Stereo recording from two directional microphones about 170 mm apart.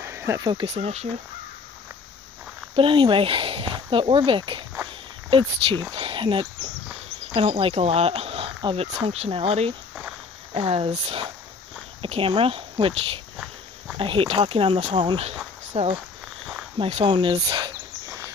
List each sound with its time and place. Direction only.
0.0 s speech: 15° right (ahead or behind)
0.7 s speech: 40° right (ahead or behind)
2.7 s speech: 30° right (ahead or behind)
16.7 s a sound: 35° right (ahead or behind)